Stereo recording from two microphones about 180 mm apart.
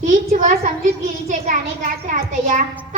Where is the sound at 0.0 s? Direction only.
45° right (ahead or behind).